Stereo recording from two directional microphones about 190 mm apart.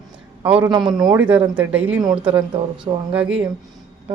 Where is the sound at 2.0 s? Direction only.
25° right (ahead or behind).